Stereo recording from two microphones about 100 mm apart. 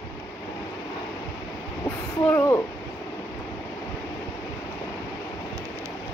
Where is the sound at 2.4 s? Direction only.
30° left (ahead or behind).